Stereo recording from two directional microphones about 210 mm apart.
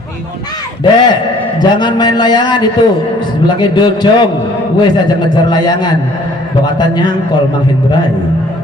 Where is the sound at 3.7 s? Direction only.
20° left (ahead or behind).